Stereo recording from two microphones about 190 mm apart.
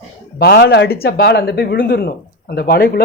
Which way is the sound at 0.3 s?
60° left (ahead or behind).